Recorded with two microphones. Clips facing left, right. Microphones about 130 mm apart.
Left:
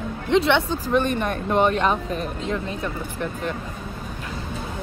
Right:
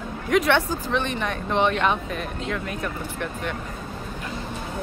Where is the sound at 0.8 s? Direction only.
45° left (ahead or behind); by 3.5 s 30° left (ahead or behind).